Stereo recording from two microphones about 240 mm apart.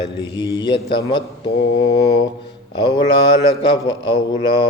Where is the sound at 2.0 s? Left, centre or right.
Left.